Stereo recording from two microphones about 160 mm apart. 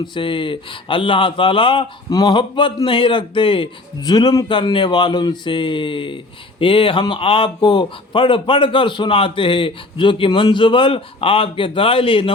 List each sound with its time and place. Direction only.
0.0 s speech: 30° left (ahead or behind)